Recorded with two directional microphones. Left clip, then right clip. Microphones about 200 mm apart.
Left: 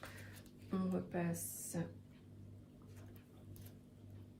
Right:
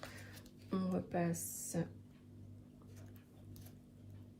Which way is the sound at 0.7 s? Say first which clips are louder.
Right 2 dB; 30° right (ahead or behind).